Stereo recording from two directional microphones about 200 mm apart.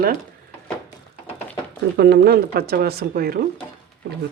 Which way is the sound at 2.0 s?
55° right (ahead or behind).